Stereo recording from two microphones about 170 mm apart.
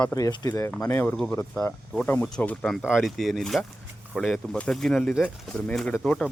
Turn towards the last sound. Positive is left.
turn(degrees=5)  # may be behind; listen again after turning